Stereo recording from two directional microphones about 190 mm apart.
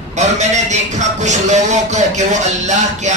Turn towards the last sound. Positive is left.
turn(degrees=-40)  # may be behind; listen again after turning